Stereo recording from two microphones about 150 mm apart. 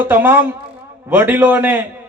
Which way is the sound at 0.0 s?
15° right (ahead or behind).